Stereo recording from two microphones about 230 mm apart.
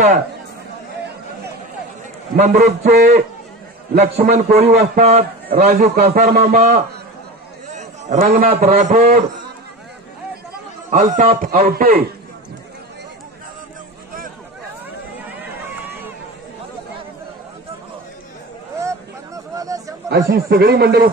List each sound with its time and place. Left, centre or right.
2.3 s speech: right
4.0 s a man's voice: right
6.4 s a man's voice: right
10.9 s a man's voice: right
11.6 s a man's voice: right
18.8 s a sound: centre
20.1 s speech: right